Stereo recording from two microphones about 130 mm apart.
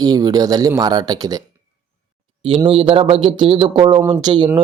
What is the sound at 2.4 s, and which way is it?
Speech, 40° right (ahead or behind).